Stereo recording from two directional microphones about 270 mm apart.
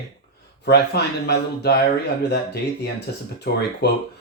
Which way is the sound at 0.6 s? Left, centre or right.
Left.